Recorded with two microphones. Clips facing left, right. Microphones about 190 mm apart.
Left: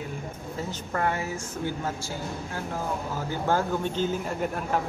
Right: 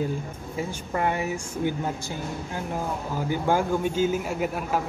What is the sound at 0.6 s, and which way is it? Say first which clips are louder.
A man's voice: right 2 dB; 15° right (ahead or behind).